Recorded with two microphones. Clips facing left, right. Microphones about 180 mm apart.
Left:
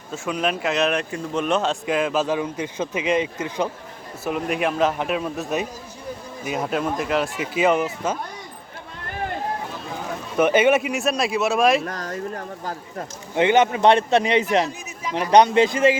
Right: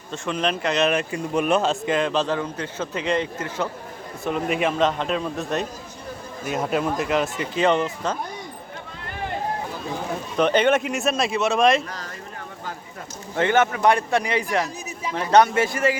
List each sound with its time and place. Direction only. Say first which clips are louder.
0.1 s speech: left 1 dB; 5° left (ahead or behind)
4.2 s speech: even; 5° left (ahead or behind)
10.3 s speech: left 2 dB; 5° left (ahead or behind)
11.9 s speech: left 7 dB; 45° left (ahead or behind)
13.3 s speech: left 3 dB; 15° left (ahead or behind)